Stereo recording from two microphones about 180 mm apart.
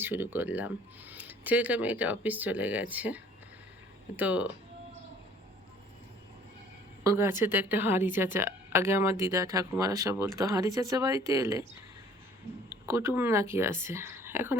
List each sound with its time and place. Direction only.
0.0 s a woman's voice: 10° right (ahead or behind)
4.2 s a woman's voice: 10° right (ahead or behind)
7.0 s a woman's voice: 15° right (ahead or behind)
12.8 s a woman's voice: 15° right (ahead or behind)